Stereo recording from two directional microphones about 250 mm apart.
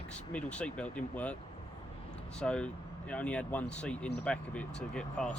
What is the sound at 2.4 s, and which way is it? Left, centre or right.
Speech, centre.